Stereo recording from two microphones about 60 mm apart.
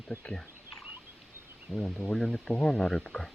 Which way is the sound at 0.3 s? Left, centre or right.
Centre.